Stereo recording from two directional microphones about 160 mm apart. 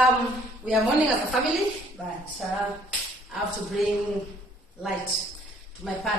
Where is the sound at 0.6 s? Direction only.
10° right (ahead or behind).